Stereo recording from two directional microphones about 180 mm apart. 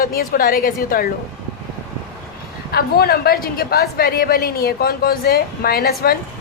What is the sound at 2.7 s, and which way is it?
A woman's voice, 60° left (ahead or behind).